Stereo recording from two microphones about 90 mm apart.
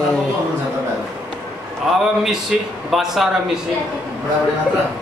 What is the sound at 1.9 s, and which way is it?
A man's voice, 5° right (ahead or behind).